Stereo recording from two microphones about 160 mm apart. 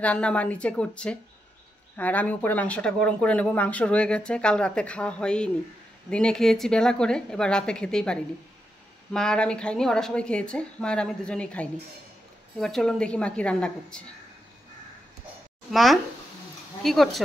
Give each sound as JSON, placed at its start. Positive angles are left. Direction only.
{"t": 0.0, "sound": "a woman's voice", "side_deg": 10}
{"t": 15.7, "sound": "a woman's voice", "side_deg": 0}